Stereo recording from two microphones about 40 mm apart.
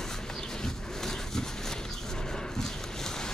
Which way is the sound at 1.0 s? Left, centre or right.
Centre.